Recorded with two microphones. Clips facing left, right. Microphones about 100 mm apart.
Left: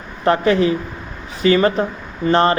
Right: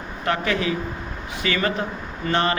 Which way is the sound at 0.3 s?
35° left (ahead or behind).